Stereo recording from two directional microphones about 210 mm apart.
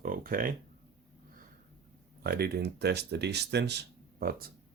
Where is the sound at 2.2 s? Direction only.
50° right (ahead or behind).